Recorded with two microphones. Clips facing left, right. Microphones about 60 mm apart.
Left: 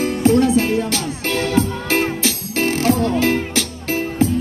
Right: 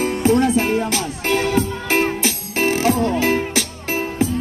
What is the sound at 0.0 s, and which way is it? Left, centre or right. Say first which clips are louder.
Music: left 1 dB; right.